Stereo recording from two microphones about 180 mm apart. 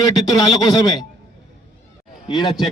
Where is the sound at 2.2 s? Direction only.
25° left (ahead or behind).